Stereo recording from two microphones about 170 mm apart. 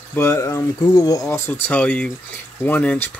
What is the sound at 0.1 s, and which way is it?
Speech, 15° left (ahead or behind).